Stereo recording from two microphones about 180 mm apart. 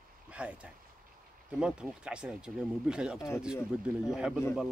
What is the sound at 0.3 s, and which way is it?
Speech, 5° right (ahead or behind).